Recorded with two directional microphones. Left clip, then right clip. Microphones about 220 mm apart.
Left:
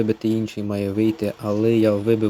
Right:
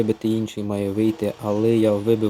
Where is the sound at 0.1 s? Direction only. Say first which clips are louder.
Even; 15° left (ahead or behind).